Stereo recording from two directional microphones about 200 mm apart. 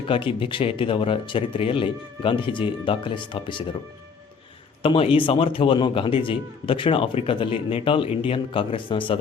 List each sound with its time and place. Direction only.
0.1 s a man's voice: 25° left (ahead or behind)
4.8 s a man's voice: 25° left (ahead or behind)